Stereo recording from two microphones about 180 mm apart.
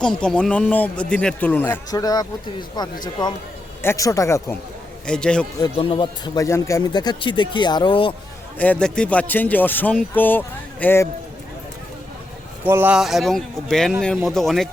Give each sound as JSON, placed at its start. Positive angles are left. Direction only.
{"t": 0.0, "sound": "a man's voice", "side_deg": 5}
{"t": 5.0, "sound": "speech", "side_deg": 5}
{"t": 5.7, "sound": "speech", "side_deg": 30}
{"t": 8.5, "sound": "a man's voice", "side_deg": 10}
{"t": 12.6, "sound": "speech", "side_deg": -10}